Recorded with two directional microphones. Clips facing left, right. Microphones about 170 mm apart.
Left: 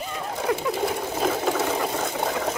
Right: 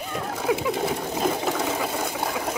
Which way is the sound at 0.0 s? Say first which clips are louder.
Right 1 dB; centre (ahead or behind).